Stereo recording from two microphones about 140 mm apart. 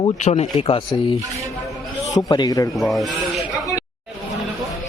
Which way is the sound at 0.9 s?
35° left (ahead or behind).